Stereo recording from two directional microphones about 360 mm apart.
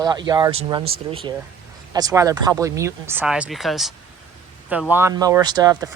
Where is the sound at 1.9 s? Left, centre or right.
Centre.